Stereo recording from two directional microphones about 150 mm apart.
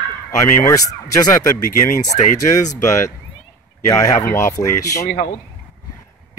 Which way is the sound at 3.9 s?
20° left (ahead or behind).